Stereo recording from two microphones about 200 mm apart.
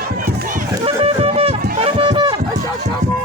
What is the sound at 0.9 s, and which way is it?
Music, 30° right (ahead or behind).